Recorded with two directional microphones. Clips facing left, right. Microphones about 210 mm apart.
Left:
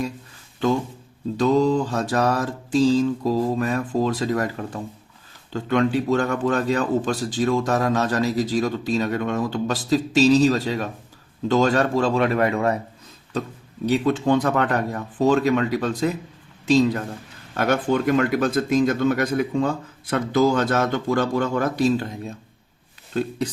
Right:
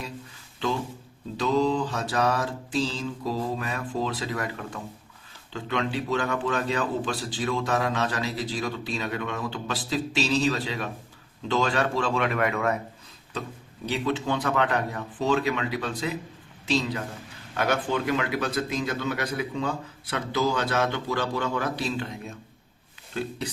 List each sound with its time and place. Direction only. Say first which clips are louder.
1.4 s a man's voice: left 5 dB; 45° left (ahead or behind)
13.9 s a man's voice: left 8 dB; 45° left (ahead or behind)